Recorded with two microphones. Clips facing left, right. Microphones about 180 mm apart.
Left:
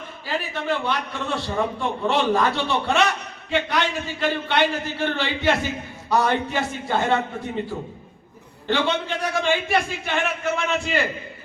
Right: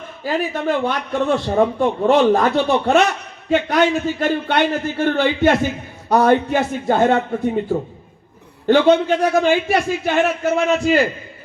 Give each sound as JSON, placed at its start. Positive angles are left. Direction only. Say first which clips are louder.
{"t": 0.3, "sound": "a man's voice", "louder": "right 6 dB", "side_deg": -45}
{"t": 8.6, "sound": "a man's voice", "louder": "right 10 dB", "side_deg": -45}